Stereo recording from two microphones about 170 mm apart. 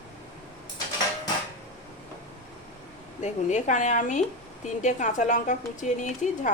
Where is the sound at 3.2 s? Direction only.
45° left (ahead or behind).